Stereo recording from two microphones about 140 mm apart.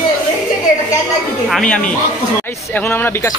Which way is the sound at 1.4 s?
5° left (ahead or behind).